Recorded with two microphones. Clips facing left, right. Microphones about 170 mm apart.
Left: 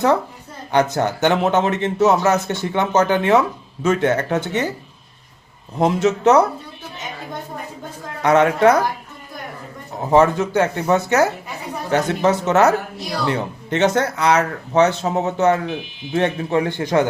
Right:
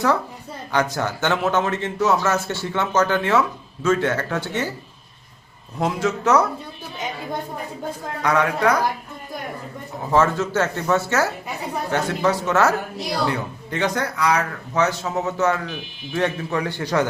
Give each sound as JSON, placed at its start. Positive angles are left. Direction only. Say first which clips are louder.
{"t": 0.7, "sound": "speech", "louder": "left 5 dB", "side_deg": 20}
{"t": 5.8, "sound": "speech", "louder": "left 6 dB", "side_deg": 20}
{"t": 8.2, "sound": "speech", "louder": "left 6 dB", "side_deg": 25}
{"t": 10.1, "sound": "speech", "louder": "left 4 dB", "side_deg": 15}